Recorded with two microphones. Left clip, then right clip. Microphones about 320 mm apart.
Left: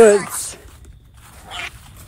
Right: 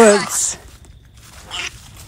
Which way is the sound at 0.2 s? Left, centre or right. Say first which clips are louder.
Right 7 dB; centre.